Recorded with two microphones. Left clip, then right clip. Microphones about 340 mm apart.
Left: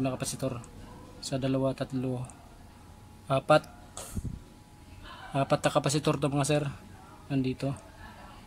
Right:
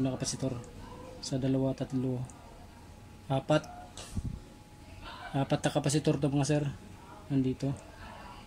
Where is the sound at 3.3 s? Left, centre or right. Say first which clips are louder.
Left 6 dB; left.